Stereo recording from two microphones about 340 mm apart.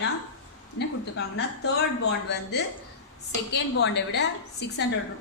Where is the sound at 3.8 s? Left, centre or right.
Left.